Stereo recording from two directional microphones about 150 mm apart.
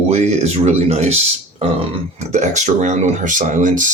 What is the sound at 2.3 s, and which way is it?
Speech, 55° right (ahead or behind).